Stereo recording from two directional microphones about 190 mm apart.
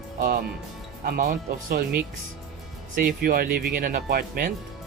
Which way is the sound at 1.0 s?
45° right (ahead or behind).